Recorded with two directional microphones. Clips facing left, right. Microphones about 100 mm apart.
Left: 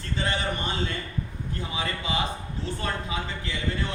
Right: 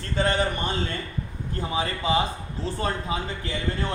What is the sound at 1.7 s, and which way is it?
Speech, 35° right (ahead or behind).